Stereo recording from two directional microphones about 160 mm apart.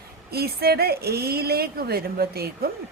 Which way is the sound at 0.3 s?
80° right.